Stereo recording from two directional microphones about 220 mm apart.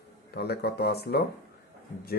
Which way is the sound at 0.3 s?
45° left (ahead or behind).